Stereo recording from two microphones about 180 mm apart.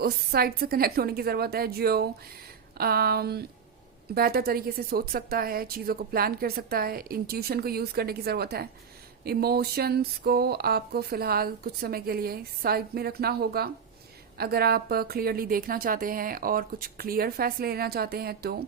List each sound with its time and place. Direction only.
0.0 s a woman's voice: 60° right (ahead or behind)